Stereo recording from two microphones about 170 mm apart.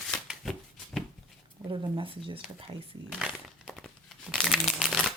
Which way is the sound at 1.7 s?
30° right (ahead or behind).